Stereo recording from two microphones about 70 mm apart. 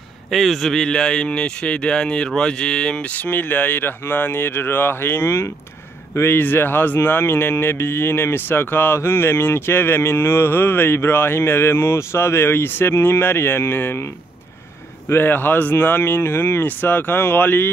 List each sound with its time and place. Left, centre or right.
0.3 s speech: centre; by 17.6 s left